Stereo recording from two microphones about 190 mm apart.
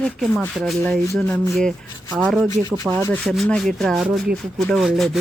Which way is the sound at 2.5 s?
20° left (ahead or behind).